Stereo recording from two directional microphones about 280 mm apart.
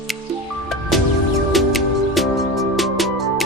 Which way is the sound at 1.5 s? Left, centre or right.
Centre.